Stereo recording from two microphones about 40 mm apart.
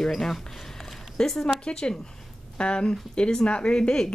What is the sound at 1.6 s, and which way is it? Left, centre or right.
Speech, left.